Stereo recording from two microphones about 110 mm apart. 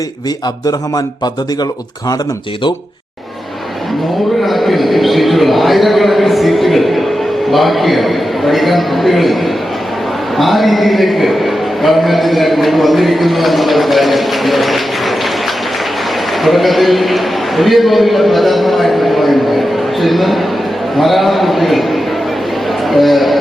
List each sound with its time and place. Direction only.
0.6 s speech: 35° left (ahead or behind)
4.4 s a man's voice: centre (ahead or behind)
16.4 s a man's voice: centre (ahead or behind)